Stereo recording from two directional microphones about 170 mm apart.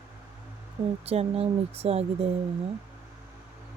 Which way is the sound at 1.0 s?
35° right (ahead or behind).